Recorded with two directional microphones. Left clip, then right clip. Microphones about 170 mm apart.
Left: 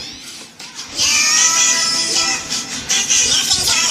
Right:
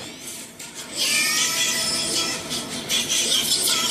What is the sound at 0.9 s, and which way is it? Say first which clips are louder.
Music: left 7 dB; 35° left (ahead or behind).